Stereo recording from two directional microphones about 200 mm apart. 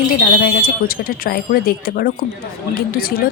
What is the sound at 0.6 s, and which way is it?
A woman's voice, 45° left (ahead or behind).